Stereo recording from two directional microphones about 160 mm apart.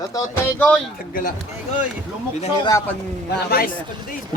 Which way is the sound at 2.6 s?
20° left (ahead or behind).